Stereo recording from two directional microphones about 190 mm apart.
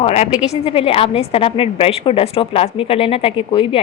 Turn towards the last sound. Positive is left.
turn(degrees=30)  # may be behind; listen again after turning